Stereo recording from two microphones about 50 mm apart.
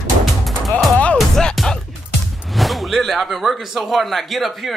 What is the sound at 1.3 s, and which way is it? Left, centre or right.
Music, centre.